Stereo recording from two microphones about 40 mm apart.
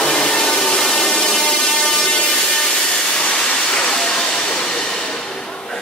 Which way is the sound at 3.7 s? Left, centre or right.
Centre.